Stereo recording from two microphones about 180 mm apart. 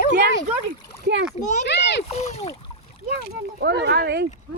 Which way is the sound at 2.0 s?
35° left (ahead or behind).